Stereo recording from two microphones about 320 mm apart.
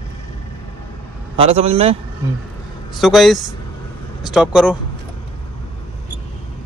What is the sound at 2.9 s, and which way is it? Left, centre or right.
A man's voice, centre.